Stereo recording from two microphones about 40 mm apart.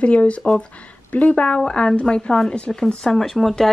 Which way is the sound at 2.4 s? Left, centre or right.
Centre.